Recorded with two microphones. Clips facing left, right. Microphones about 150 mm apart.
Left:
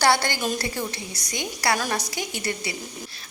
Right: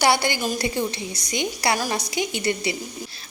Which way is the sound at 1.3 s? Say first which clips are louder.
Right 2 dB; 20° right (ahead or behind).